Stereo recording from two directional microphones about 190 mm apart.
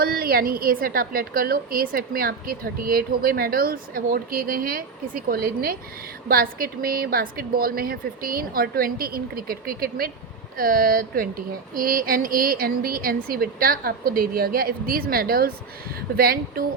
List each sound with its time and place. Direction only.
0.0 s a woman's voice: 50° right (ahead or behind)